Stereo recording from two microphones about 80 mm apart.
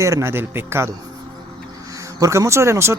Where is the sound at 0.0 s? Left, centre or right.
Right.